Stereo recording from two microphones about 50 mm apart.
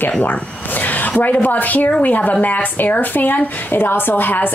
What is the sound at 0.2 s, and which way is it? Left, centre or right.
Zipper, left.